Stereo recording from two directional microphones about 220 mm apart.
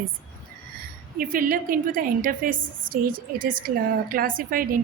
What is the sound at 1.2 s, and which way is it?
A woman's voice, 40° right (ahead or behind).